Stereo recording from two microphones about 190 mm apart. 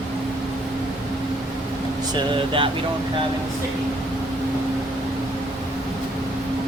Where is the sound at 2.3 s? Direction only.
25° right (ahead or behind).